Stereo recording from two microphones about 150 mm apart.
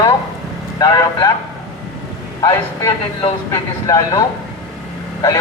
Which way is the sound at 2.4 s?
30° left (ahead or behind).